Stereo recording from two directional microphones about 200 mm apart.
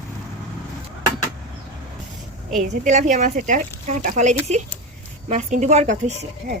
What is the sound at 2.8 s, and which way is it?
Speech, 35° right (ahead or behind).